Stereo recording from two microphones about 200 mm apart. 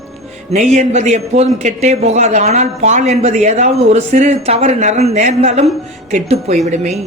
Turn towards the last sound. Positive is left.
turn(degrees=-35)  # may be behind; listen again after turning